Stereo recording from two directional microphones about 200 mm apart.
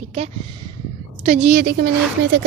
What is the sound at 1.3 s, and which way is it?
Speech, 40° right (ahead or behind).